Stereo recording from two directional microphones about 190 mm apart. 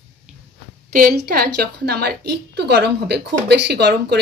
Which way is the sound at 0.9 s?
50° right (ahead or behind).